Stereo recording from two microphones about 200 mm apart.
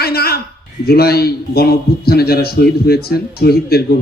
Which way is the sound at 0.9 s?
50° left (ahead or behind).